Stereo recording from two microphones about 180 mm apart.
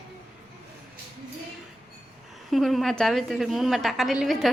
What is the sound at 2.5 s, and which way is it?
A woman's voice, centre (ahead or behind).